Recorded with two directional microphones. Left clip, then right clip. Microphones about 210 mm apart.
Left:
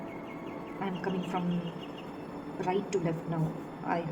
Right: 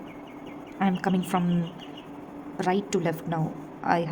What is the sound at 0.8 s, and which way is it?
Speech, 45° right (ahead or behind).